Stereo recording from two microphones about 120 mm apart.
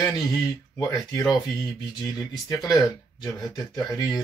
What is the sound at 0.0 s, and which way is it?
Speech, 30° left (ahead or behind).